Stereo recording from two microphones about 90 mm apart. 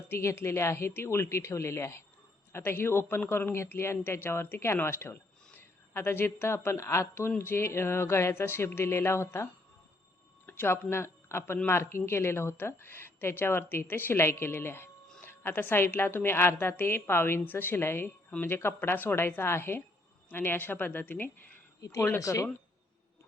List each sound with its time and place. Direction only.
0.1 s speech: 30° left (ahead or behind)
21.8 s speech: 40° left (ahead or behind)